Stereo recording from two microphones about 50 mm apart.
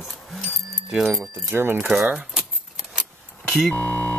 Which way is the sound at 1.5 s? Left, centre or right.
Right.